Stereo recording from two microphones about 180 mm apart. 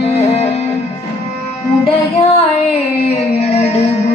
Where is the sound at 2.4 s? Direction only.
35° left (ahead or behind).